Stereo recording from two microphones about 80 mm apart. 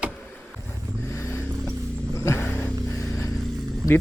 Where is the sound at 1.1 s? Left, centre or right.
Left.